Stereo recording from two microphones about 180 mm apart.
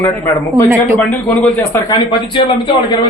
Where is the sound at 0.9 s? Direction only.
5° left (ahead or behind).